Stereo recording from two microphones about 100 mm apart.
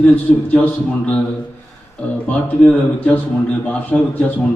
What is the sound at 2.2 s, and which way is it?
A man's voice, 15° left (ahead or behind).